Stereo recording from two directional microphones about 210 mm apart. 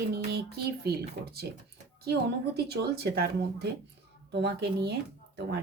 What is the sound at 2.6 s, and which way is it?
Speech, 50° right (ahead or behind).